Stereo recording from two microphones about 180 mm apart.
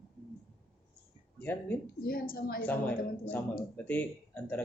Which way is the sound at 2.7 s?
10° left (ahead or behind).